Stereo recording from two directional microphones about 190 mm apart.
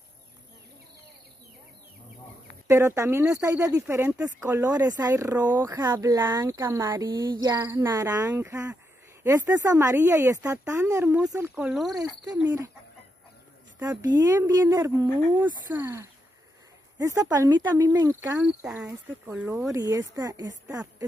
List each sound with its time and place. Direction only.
2.7 s speech: 15° right (ahead or behind)
12.3 s speech: 15° right (ahead or behind)
13.8 s speech: 20° right (ahead or behind)
19.7 s speech: 20° right (ahead or behind)